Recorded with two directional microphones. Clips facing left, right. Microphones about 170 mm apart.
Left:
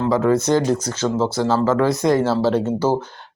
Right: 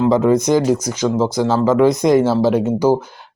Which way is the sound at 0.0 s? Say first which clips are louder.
Right 4 dB; 15° right (ahead or behind).